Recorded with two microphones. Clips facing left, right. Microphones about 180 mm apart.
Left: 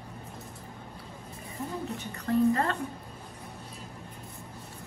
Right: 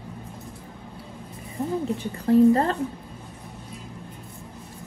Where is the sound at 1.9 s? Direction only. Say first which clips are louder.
Right 9 dB; 30° right (ahead or behind).